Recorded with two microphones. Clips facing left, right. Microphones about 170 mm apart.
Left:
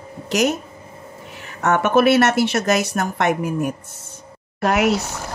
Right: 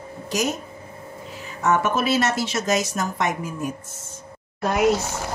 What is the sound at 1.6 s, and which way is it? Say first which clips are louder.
Speech: left 5 dB; 65° left (ahead or behind).